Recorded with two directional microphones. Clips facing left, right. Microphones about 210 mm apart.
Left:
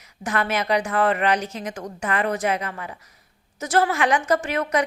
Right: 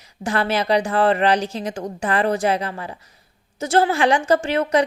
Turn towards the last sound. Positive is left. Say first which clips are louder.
# right 4 dB
turn(degrees=-30)  # may be behind; listen again after turning